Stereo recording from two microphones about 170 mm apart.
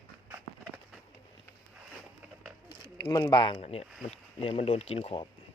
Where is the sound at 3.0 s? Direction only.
25° left (ahead or behind).